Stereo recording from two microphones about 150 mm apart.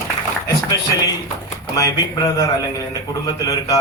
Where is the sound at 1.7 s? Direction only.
25° left (ahead or behind).